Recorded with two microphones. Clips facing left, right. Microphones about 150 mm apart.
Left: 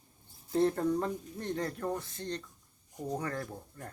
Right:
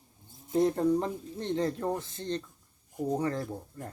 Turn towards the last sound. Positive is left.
turn(degrees=-20)  # may be behind; listen again after turning